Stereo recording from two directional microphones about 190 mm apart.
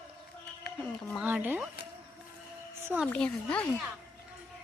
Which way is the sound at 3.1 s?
5° left (ahead or behind).